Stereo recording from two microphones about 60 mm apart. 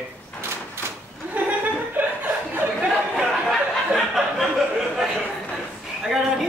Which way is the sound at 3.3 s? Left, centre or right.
Centre.